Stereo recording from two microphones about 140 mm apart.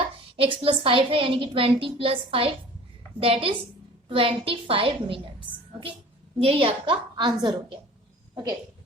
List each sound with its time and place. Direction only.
0.3 s a woman's voice: 40° right (ahead or behind)